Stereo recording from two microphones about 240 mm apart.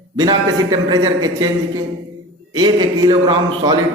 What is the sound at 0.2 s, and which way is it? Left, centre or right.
A man's voice, centre.